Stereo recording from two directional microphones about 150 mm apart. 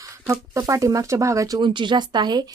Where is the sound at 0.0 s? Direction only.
20° right (ahead or behind).